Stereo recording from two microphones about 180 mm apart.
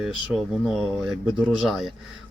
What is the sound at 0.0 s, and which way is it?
Speech, centre (ahead or behind).